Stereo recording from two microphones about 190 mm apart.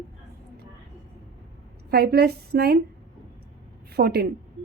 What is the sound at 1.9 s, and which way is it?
Speech, 55° right (ahead or behind).